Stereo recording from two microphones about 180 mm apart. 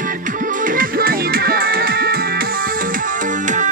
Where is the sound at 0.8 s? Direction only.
55° right (ahead or behind).